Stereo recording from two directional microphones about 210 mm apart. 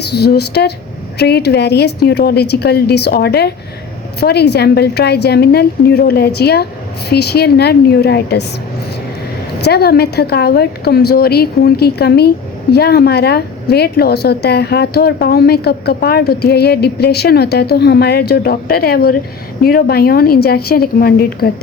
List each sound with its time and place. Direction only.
0.0 s a woman's voice: 50° left (ahead or behind)
9.6 s a woman's voice: 50° left (ahead or behind)